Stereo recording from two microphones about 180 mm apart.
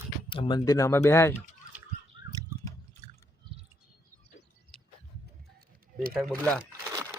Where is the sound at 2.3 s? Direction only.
20° right (ahead or behind).